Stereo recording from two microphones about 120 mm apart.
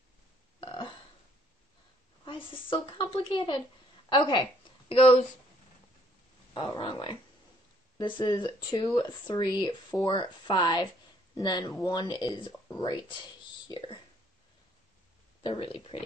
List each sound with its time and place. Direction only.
0.6 s burping: 45° left (ahead or behind)
2.2 s a woman's voice: 45° left (ahead or behind)
4.8 s speech: 50° left (ahead or behind)
6.5 s speech: 45° left (ahead or behind)
15.4 s a woman's voice: 50° left (ahead or behind)